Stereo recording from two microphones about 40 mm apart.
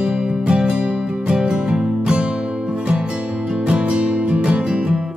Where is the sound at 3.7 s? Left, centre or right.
Right.